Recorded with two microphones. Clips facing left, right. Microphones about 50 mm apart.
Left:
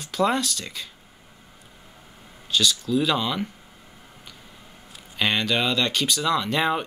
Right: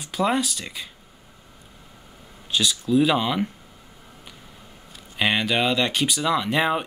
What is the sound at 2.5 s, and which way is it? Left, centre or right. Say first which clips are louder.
Speech: even; centre.